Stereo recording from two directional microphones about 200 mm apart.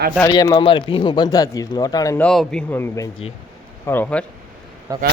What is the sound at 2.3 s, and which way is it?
A man's voice, 5° left (ahead or behind).